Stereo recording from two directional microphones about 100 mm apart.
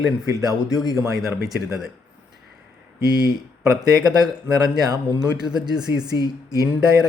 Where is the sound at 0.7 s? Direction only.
5° right (ahead or behind).